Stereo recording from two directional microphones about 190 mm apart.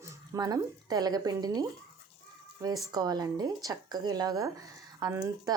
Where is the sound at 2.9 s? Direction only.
20° right (ahead or behind).